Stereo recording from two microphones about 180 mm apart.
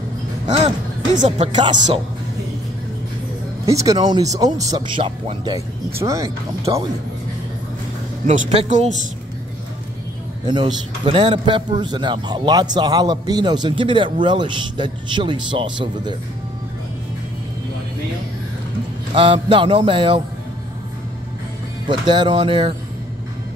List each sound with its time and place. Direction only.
0.5 s speech: 35° right (ahead or behind)
3.6 s a man's voice: 20° right (ahead or behind)
5.9 s speech: 15° right (ahead or behind)
8.3 s speech: 40° right (ahead or behind)
10.4 s a man's voice: 25° right (ahead or behind)
19.1 s a man's voice: 30° right (ahead or behind)
21.8 s a man's voice: 25° right (ahead or behind)